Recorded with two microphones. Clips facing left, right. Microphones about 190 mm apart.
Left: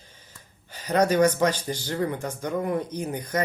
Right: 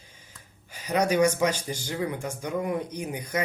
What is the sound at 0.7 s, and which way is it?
Speech, 10° right (ahead or behind).